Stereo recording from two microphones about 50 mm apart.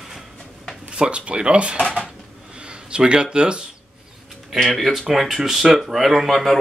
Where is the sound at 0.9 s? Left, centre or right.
Centre.